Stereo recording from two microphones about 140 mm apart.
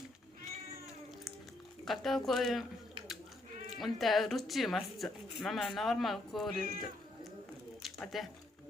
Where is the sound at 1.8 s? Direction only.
Centre (ahead or behind).